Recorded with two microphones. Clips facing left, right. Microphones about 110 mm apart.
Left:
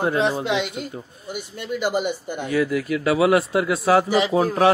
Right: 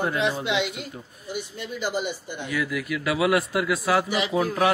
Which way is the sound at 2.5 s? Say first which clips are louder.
Left 6 dB; 30° left (ahead or behind).